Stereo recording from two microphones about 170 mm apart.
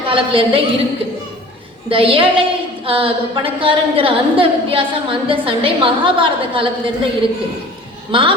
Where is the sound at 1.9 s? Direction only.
30° right (ahead or behind).